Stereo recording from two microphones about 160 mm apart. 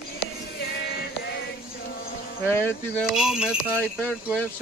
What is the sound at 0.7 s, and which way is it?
Male singing, 75° left (ahead or behind).